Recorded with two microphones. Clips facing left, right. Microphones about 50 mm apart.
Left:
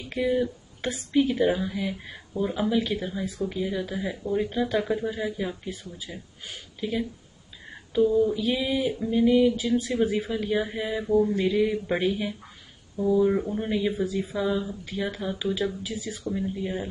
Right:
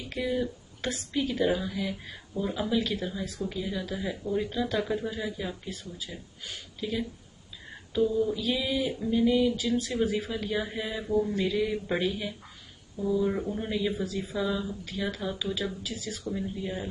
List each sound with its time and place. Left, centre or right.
0.1 s speech: centre
11.4 s speech: centre